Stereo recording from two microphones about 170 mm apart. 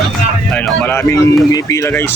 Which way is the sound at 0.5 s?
10° left (ahead or behind).